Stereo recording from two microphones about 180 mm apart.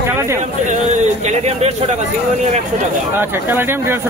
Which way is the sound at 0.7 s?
40° right (ahead or behind).